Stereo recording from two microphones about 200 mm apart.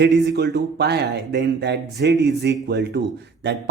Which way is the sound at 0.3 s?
55° right (ahead or behind).